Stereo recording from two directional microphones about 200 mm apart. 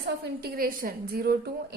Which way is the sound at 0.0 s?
50° right (ahead or behind).